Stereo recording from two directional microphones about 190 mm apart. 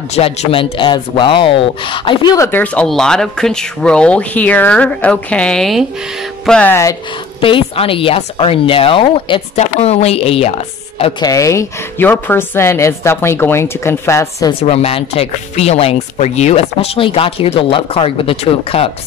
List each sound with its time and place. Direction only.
0.1 s speech: 35° left (ahead or behind); by 7.0 s 15° left (ahead or behind)
7.4 s speech: 30° left (ahead or behind)
14.6 s speech: 30° left (ahead or behind)